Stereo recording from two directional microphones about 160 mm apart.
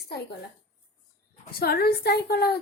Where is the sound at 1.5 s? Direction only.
75° left (ahead or behind).